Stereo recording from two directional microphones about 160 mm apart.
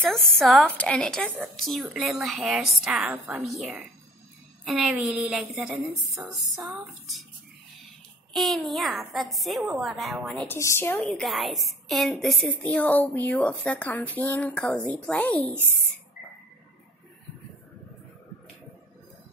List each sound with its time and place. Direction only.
0.1 s a woman's voice: centre (ahead or behind); by 6.3 s 15° right (ahead or behind)
8.3 s a woman's voice: centre (ahead or behind); by 11.0 s 15° left (ahead or behind)
11.0 s a woman's voice: 5° left (ahead or behind)